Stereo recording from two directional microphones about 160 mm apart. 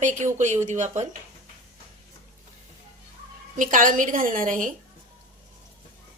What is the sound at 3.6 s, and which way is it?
A woman's voice, 55° right (ahead or behind).